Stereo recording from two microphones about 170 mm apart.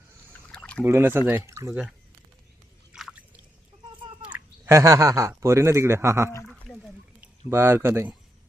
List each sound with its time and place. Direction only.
0.4 s a sound: 5° left (ahead or behind)
0.9 s speech: 15° right (ahead or behind)
2.9 s drip: 5° right (ahead or behind)
4.2 s speech: 10° right (ahead or behind)
6.4 s wild animals: centre (ahead or behind)
7.5 s speech: 15° right (ahead or behind)